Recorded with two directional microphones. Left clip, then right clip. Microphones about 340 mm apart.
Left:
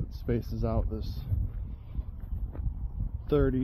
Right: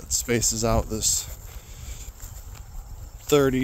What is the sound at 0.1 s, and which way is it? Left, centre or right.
Speech, right.